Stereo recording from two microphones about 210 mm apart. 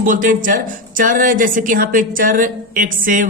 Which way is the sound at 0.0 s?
40° right (ahead or behind).